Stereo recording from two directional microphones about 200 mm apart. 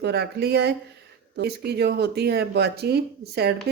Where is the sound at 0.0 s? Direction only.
55° right (ahead or behind).